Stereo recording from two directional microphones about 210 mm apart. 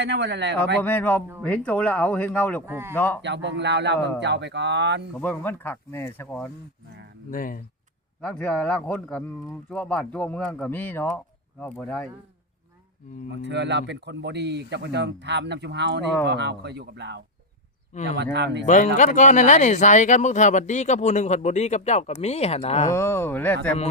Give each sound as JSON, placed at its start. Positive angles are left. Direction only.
{"t": 0.0, "sound": "speech", "side_deg": -55}
{"t": 0.8, "sound": "speech", "side_deg": 10}
{"t": 2.6, "sound": "speech", "side_deg": -10}
{"t": 2.9, "sound": "speech", "side_deg": 10}
{"t": 3.2, "sound": "speech", "side_deg": -55}
{"t": 5.2, "sound": "speech", "side_deg": 10}
{"t": 7.3, "sound": "speech", "side_deg": 40}
{"t": 8.2, "sound": "speech", "side_deg": 5}
{"t": 13.5, "sound": "speech", "side_deg": -55}
{"t": 17.9, "sound": "speech", "side_deg": 35}
{"t": 18.3, "sound": "speech", "side_deg": -55}
{"t": 18.6, "sound": "speech", "side_deg": 35}
{"t": 22.9, "sound": "speech", "side_deg": 10}